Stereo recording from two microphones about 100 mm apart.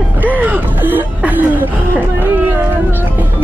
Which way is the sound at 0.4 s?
20° right (ahead or behind).